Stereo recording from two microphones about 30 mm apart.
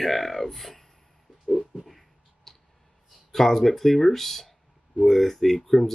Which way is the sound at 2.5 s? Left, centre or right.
Centre.